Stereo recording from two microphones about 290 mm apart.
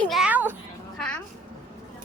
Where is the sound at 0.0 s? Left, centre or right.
Centre.